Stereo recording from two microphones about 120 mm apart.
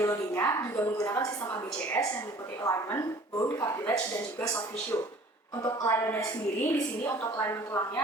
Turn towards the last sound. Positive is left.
turn(degrees=20)  # may be behind; listen again after turning